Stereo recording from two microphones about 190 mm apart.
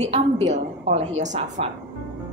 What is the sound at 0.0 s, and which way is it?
A woman's voice, 35° right (ahead or behind).